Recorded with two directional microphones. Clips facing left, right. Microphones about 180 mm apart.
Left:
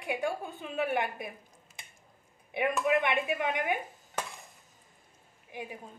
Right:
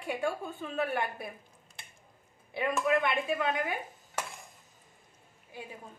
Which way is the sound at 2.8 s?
15° left (ahead or behind).